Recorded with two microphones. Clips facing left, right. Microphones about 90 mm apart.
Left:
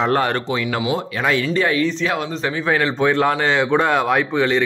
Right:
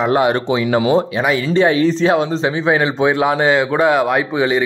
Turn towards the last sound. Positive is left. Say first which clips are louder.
# right 2 dB
turn(degrees=-10)  # may be behind; listen again after turning